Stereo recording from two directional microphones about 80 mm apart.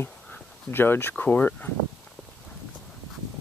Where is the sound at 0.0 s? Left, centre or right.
Left.